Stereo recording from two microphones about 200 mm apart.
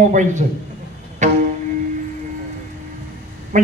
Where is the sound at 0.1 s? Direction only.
40° right (ahead or behind).